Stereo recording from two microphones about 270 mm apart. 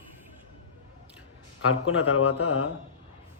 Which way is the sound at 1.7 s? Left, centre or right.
Left.